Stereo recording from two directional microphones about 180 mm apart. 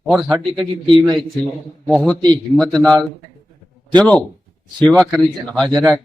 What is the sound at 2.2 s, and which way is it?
Speech, 25° right (ahead or behind).